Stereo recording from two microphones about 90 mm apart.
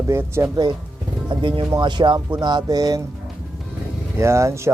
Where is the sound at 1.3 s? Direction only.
70° right (ahead or behind); by 3.0 s 45° right (ahead or behind).